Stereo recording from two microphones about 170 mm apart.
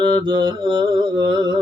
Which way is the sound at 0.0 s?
25° right (ahead or behind).